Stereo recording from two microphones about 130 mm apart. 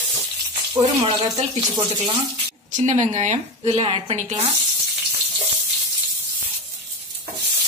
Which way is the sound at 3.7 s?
45° right (ahead or behind).